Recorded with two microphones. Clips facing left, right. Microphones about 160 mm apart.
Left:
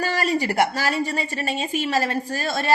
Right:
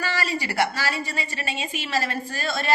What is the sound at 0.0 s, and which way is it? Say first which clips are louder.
Speech: left 5 dB; 45° left (ahead or behind).